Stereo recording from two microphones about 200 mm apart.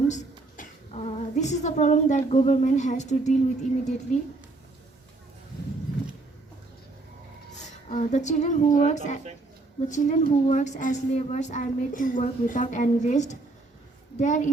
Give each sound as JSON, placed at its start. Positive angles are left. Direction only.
{"t": 0.1, "sound": "a woman's voice", "side_deg": 40}
{"t": 7.9, "sound": "a woman's voice", "side_deg": 35}